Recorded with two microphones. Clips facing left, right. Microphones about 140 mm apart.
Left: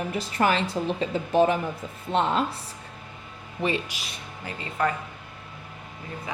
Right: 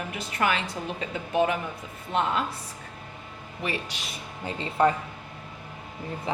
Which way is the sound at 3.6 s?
25° left (ahead or behind).